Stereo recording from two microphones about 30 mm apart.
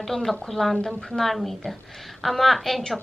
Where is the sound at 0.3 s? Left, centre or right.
Centre.